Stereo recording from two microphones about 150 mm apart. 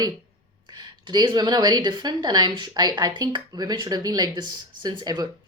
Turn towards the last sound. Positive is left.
turn(degrees=-25)  # may be behind; listen again after turning